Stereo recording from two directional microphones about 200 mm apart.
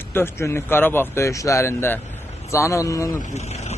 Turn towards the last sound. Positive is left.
turn(degrees=35)  # may be behind; listen again after turning